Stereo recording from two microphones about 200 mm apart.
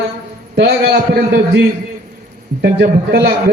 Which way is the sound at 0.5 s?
50° right (ahead or behind).